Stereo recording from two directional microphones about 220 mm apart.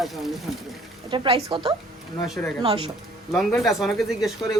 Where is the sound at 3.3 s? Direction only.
Centre (ahead or behind).